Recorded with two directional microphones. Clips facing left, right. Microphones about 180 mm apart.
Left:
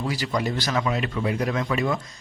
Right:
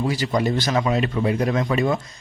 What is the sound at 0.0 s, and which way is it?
A man's voice, 25° right (ahead or behind).